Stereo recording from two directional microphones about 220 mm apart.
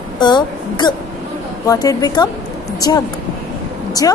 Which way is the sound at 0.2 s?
20° left (ahead or behind).